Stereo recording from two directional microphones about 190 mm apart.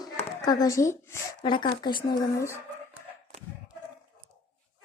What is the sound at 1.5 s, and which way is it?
Speech, 25° left (ahead or behind).